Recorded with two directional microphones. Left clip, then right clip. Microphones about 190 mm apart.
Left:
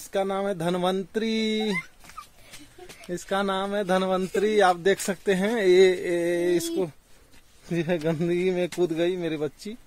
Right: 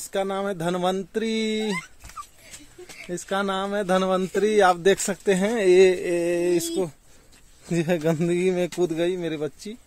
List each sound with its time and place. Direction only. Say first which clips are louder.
0.0 s speech: even; 10° right (ahead or behind)
3.1 s speech: right 1 dB; 10° right (ahead or behind)
8.7 s speech: right 1 dB; 15° right (ahead or behind)